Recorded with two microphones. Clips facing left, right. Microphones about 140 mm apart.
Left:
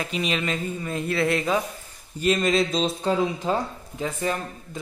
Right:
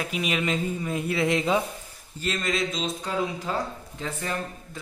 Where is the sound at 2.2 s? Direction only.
20° left (ahead or behind).